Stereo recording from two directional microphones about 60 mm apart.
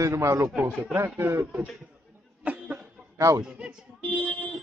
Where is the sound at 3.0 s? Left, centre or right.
Centre.